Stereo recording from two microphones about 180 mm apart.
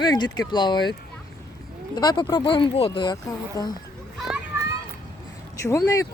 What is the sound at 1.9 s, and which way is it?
Speech, 25° left (ahead or behind).